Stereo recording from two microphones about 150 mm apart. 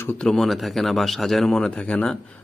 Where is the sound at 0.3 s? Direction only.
Centre (ahead or behind).